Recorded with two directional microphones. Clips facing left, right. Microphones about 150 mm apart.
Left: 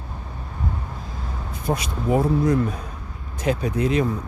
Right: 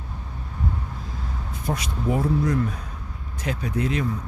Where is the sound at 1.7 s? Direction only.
15° left (ahead or behind).